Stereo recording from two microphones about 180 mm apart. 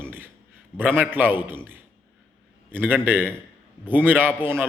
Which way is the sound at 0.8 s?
10° right (ahead or behind).